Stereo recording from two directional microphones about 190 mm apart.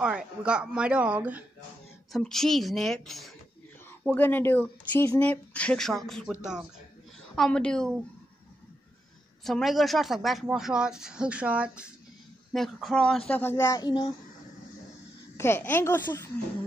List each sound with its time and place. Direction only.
0.0 s speech: 5° right (ahead or behind)
9.4 s speech: centre (ahead or behind); by 14.1 s 20° left (ahead or behind)
15.3 s speech: 15° left (ahead or behind)